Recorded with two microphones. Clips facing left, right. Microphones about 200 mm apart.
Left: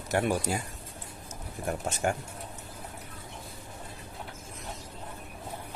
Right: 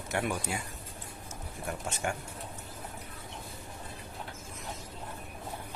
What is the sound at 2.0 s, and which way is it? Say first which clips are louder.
Speech: left 5 dB; 40° left (ahead or behind).